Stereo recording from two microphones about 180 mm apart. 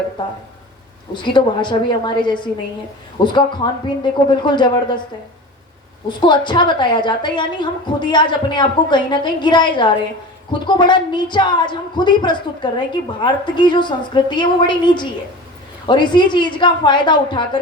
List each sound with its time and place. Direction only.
0.2 s a woman's voice: 25° left (ahead or behind)
6.1 s a woman's voice: 25° left (ahead or behind)